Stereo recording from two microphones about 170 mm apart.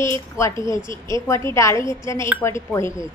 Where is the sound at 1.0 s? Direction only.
15° left (ahead or behind).